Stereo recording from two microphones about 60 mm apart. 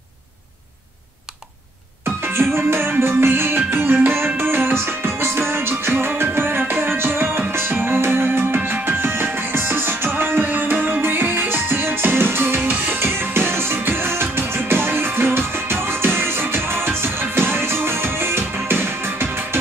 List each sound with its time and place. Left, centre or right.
2.0 s music: right